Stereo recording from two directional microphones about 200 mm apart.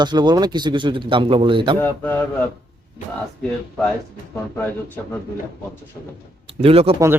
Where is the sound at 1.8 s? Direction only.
10° left (ahead or behind).